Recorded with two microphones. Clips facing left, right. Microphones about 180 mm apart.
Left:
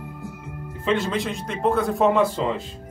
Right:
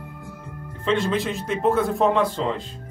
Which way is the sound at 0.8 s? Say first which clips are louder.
Right 1 dB; centre (ahead or behind).